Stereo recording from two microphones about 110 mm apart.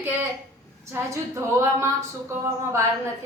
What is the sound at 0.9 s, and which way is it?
Speech, 25° right (ahead or behind).